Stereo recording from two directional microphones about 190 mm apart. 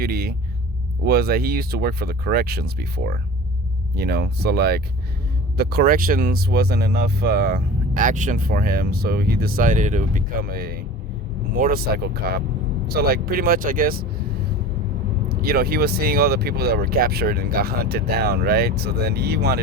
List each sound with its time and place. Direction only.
0.0 s speech: 55° right (ahead or behind)
15.3 s speech: 55° right (ahead or behind)